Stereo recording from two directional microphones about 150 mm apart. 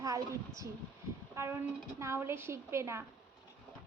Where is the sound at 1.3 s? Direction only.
20° right (ahead or behind).